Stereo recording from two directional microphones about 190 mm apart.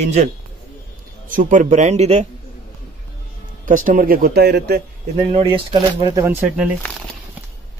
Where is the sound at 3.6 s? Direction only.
45° right (ahead or behind).